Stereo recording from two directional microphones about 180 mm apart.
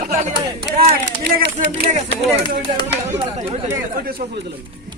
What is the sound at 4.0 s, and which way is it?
Speech, 55° right (ahead or behind).